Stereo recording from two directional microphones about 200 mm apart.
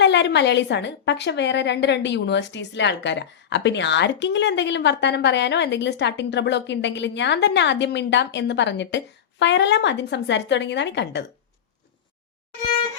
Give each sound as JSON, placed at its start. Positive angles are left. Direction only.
{"t": 0.0, "sound": "a woman's voice", "side_deg": 60}